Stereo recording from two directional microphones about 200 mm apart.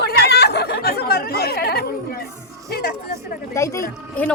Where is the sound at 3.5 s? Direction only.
15° left (ahead or behind).